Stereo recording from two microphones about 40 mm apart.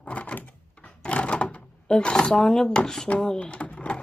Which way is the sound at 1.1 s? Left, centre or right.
Left.